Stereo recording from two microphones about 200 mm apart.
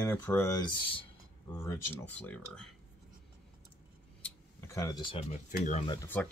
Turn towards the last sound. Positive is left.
turn(degrees=20)  # may be behind; listen again after turning